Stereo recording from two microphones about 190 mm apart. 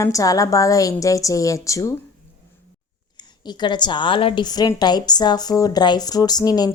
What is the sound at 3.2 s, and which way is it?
A woman's voice, 20° left (ahead or behind).